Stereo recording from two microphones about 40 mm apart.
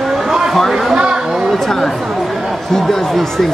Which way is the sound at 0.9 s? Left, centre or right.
Right.